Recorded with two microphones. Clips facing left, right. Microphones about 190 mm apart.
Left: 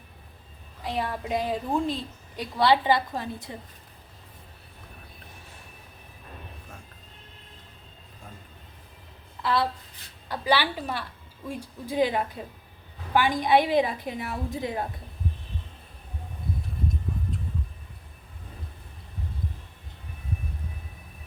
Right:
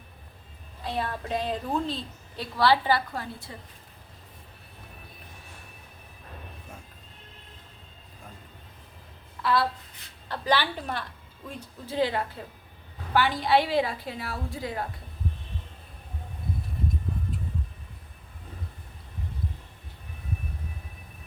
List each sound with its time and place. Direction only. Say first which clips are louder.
0.9 s a woman's voice: left 1 dB; 15° left (ahead or behind)
9.4 s a woman's voice: even; 20° left (ahead or behind)